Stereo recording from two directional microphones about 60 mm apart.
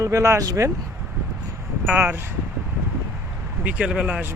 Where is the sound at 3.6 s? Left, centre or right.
Centre.